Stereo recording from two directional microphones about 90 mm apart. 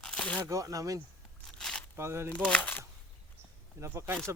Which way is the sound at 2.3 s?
15° left (ahead or behind).